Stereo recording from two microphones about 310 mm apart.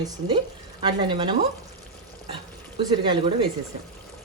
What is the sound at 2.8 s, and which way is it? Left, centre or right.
Speech, centre.